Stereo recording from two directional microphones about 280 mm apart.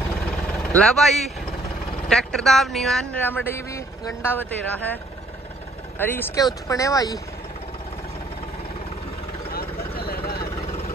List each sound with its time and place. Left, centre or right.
0.2 s vehicle: centre
2.0 s speech: centre
5.9 s speech: centre
9.5 s vehicle: left